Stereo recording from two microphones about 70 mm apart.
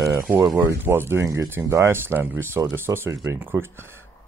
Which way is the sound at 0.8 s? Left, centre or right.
Right.